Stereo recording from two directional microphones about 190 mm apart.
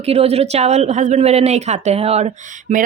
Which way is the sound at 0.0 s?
30° right (ahead or behind).